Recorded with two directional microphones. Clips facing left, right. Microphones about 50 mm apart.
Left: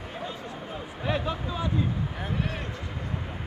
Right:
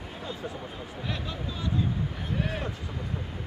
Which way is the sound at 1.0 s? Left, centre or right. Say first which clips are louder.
Left 7 dB; left.